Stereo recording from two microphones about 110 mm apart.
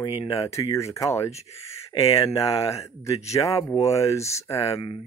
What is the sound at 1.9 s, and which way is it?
Speech, 40° left (ahead or behind).